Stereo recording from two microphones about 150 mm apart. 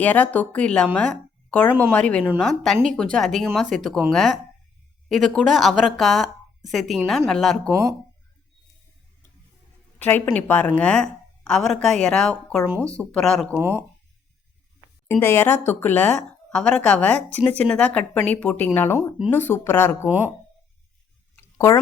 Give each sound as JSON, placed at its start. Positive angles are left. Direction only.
{"t": 0.0, "sound": "a woman's voice", "side_deg": 10}
{"t": 7.7, "sound": "speech", "side_deg": -20}
{"t": 10.0, "sound": "a woman's voice", "side_deg": 10}
{"t": 13.5, "sound": "speech", "side_deg": -15}
{"t": 15.0, "sound": "speech", "side_deg": 15}
{"t": 20.1, "sound": "speech", "side_deg": -10}